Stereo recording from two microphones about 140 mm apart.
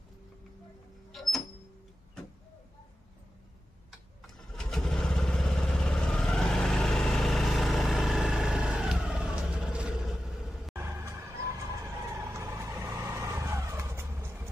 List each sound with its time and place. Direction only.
1.1 s a sound: centre (ahead or behind)
4.6 s vehicle: 5° left (ahead or behind)
10.8 s vehicle: 15° right (ahead or behind)